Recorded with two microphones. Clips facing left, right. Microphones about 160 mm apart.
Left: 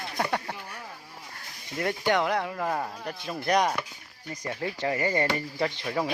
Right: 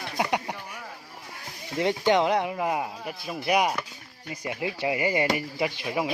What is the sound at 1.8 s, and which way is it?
Speech, 20° right (ahead or behind).